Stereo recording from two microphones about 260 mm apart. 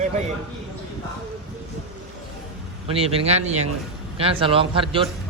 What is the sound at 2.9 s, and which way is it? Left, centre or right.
A man's voice, right.